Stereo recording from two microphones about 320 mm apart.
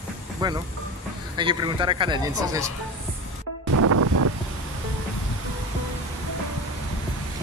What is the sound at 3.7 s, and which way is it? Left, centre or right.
Music, right.